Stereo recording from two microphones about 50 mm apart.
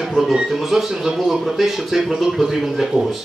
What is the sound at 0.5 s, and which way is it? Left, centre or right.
Speech, centre.